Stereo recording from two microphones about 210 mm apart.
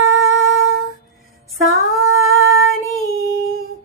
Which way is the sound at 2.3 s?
75° right (ahead or behind).